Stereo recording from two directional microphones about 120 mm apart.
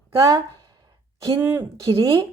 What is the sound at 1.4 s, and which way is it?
Speech, 20° right (ahead or behind).